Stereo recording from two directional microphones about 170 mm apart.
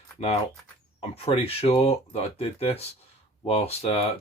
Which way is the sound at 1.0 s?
35° left (ahead or behind).